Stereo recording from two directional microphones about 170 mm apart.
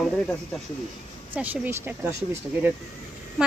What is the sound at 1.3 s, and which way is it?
Speech, 10° right (ahead or behind).